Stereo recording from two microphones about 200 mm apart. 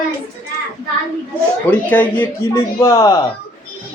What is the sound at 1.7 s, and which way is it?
A man's voice, 10° left (ahead or behind).